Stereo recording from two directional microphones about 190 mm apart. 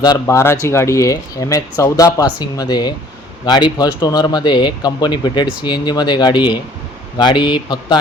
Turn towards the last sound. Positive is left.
turn(degrees=25)  # may be behind; listen again after turning